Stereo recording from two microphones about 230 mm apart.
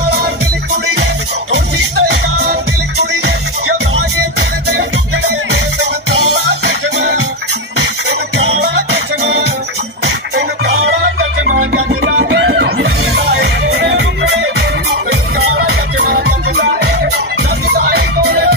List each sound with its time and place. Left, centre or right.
1.5 s music: right
8.4 s music: right